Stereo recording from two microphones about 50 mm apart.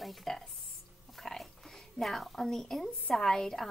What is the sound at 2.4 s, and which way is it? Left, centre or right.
Speech, centre.